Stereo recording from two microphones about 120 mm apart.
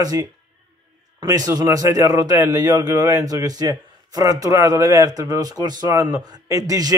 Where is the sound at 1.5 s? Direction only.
30° right (ahead or behind).